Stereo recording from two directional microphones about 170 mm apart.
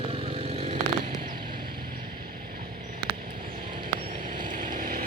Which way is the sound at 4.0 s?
55° right (ahead or behind).